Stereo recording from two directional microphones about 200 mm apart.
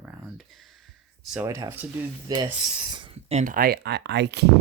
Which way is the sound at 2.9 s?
25° right (ahead or behind).